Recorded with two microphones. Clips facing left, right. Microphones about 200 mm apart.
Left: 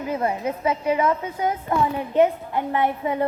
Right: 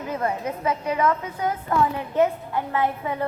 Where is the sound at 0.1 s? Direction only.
20° left (ahead or behind).